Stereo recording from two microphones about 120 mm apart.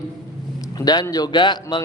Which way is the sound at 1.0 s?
35° left (ahead or behind).